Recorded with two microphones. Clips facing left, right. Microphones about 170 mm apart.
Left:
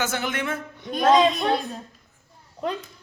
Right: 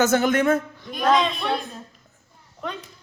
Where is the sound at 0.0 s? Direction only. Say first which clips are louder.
Right 8 dB; 45° right (ahead or behind).